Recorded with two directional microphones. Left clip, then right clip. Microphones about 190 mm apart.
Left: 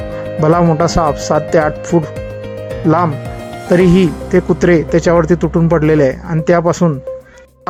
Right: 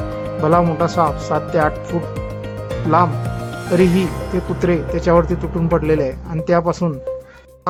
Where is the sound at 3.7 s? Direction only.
25° left (ahead or behind).